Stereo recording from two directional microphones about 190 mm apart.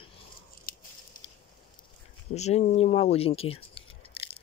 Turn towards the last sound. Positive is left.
turn(degrees=30)  # may be behind; listen again after turning